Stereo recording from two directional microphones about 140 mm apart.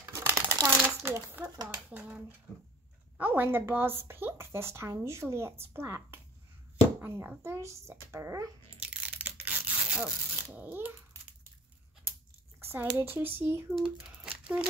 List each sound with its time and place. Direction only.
0.0 s crumpling: 20° right (ahead or behind)
0.7 s a sound: 15° right (ahead or behind)
1.6 s a woman's voice: 15° right (ahead or behind)
8.8 s a sound: 10° right (ahead or behind)
12.5 s a woman's voice: 15° right (ahead or behind)
13.7 s crumpling: 5° right (ahead or behind)